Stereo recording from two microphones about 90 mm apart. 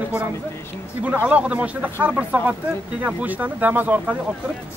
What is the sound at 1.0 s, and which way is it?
Speech, 15° right (ahead or behind).